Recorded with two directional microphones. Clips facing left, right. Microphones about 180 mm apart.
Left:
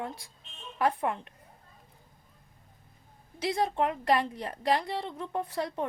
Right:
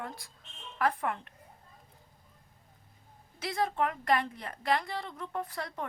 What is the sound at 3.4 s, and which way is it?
A woman's voice, 30° left (ahead or behind).